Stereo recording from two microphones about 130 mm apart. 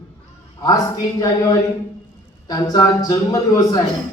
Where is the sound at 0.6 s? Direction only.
30° left (ahead or behind).